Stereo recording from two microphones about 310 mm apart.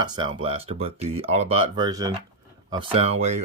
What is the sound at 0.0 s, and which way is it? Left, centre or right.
Speech, centre.